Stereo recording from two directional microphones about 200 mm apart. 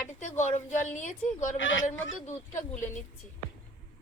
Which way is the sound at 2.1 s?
40° left (ahead or behind).